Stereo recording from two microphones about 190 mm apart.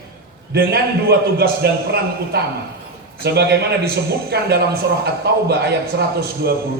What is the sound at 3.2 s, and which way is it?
Speech, 60° right (ahead or behind).